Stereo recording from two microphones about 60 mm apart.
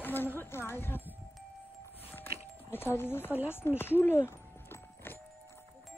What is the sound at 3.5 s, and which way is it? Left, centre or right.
Speech, left.